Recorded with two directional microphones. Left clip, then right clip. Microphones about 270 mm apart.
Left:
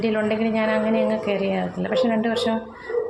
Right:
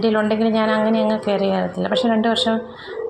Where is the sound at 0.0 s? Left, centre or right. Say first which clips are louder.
Right 4 dB; centre.